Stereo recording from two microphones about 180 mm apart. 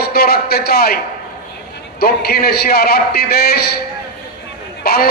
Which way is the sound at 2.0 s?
55° left (ahead or behind).